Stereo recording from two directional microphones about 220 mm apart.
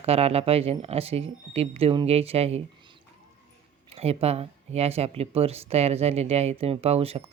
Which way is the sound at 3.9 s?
25° right (ahead or behind).